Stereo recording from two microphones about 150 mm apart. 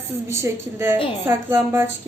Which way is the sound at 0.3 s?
20° right (ahead or behind).